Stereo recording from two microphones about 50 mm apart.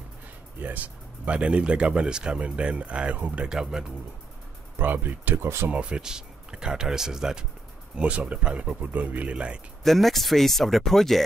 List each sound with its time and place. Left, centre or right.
0.6 s speech: right
3.4 s speech: centre
4.8 s speech: right
5.7 s speech: right
7.9 s speech: right
9.8 s speech: centre